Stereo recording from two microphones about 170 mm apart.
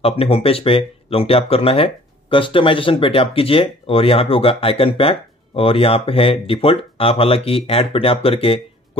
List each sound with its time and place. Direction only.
0.0 s speech: 35° left (ahead or behind)